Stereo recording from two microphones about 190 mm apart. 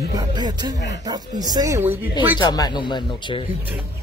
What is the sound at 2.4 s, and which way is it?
Speech, 20° left (ahead or behind).